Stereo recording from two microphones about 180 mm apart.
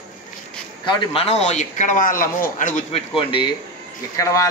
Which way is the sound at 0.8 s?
30° left (ahead or behind).